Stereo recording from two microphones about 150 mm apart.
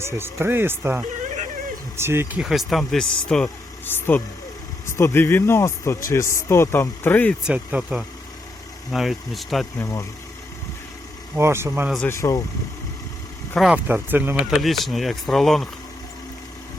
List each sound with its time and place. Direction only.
0.0 s speech: 15° right (ahead or behind)
2.4 s speech: centre (ahead or behind)
7.4 s speech: 10° right (ahead or behind)
9.7 s speech: 20° left (ahead or behind)
11.3 s speech: 15° right (ahead or behind)
12.0 s speech: 20° left (ahead or behind)
13.6 s speech: 5° right (ahead or behind)
14.5 s speech: centre (ahead or behind)